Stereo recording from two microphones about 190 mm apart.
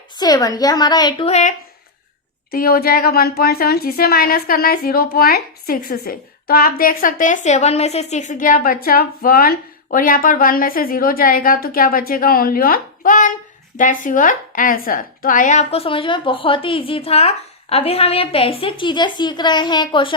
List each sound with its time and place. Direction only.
0.2 s a woman's voice: 20° left (ahead or behind)
1.3 s speech: 35° left (ahead or behind)
2.5 s a woman's voice: 50° left (ahead or behind); by 20.1 s 25° left (ahead or behind)